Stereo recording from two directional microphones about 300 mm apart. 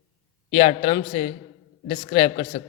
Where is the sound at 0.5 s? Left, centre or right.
Centre.